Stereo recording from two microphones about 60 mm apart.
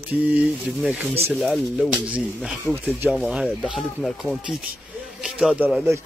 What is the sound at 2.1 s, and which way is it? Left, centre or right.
Speech, right.